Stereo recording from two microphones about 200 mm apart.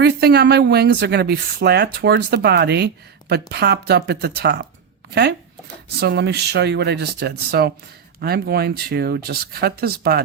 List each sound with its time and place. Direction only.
0.0 s speech: 55° right (ahead or behind)
6.0 s speech: 55° right (ahead or behind)